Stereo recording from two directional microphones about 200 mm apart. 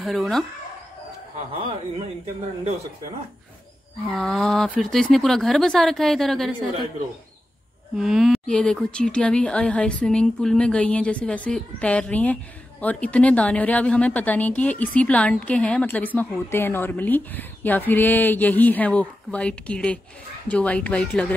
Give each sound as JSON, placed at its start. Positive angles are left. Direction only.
{"t": 0.0, "sound": "speech", "side_deg": 0}
{"t": 1.6, "sound": "speech", "side_deg": -25}
{"t": 4.1, "sound": "speech", "side_deg": 0}
{"t": 7.9, "sound": "a woman's voice", "side_deg": 0}